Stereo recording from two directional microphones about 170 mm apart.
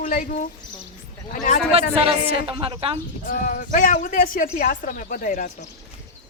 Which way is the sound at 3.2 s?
50° left (ahead or behind).